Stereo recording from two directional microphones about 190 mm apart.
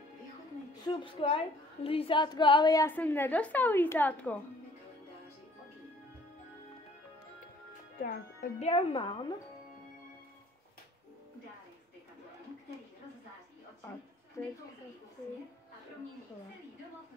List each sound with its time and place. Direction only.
0.7 s a woman's voice: 20° left (ahead or behind)
8.0 s speech: 50° left (ahead or behind)
8.5 s a woman's voice: 30° left (ahead or behind)